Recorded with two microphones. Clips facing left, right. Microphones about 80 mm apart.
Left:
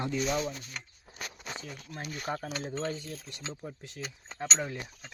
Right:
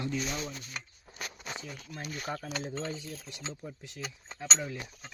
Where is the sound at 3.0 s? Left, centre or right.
Left.